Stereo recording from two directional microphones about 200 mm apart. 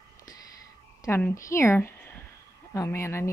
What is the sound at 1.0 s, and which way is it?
A woman's voice, 10° left (ahead or behind).